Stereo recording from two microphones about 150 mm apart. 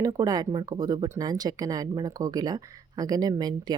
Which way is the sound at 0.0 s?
25° right (ahead or behind).